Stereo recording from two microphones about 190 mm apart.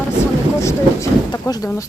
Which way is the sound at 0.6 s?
15° left (ahead or behind).